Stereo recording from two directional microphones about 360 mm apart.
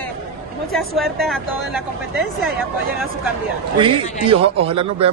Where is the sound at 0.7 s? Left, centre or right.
Centre.